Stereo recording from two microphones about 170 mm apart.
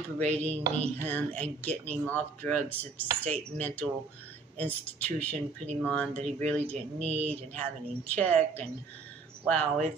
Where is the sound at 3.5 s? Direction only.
10° left (ahead or behind).